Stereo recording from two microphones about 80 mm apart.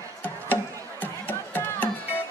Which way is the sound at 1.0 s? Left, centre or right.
Left.